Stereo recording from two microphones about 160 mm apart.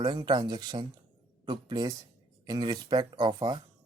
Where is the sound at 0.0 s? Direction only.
30° right (ahead or behind).